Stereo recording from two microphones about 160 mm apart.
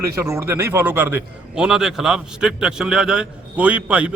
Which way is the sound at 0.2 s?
15° right (ahead or behind).